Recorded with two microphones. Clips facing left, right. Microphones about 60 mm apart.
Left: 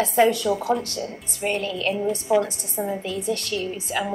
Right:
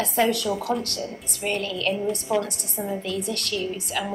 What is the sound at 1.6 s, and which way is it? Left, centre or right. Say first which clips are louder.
Speech: left 1 dB; left.